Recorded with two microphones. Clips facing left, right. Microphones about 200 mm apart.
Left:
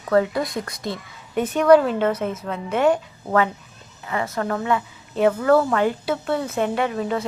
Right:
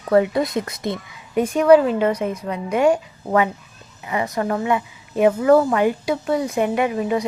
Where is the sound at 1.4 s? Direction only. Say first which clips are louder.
Right 2 dB; 10° right (ahead or behind).